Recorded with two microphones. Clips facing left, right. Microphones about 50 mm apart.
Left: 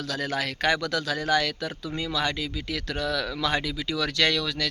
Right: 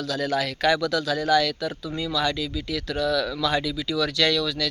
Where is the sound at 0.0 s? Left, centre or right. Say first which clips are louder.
Right 4 dB; left.